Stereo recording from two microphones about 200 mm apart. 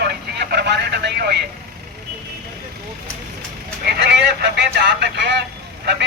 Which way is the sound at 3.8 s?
55° right (ahead or behind).